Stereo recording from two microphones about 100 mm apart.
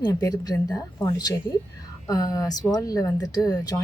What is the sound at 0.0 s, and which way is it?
Speech, 35° left (ahead or behind).